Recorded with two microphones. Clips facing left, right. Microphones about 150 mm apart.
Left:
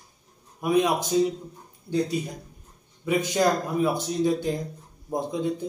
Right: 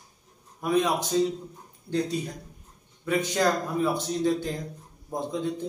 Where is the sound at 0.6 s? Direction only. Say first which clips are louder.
Left 2 dB; 15° left (ahead or behind).